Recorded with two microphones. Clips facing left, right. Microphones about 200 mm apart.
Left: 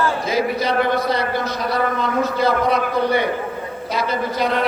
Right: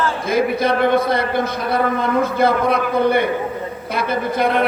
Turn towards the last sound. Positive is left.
turn(degrees=-55)  # may be behind; listen again after turning